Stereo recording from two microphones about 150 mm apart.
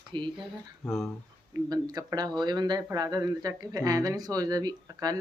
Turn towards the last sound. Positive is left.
turn(degrees=-25)  # may be behind; listen again after turning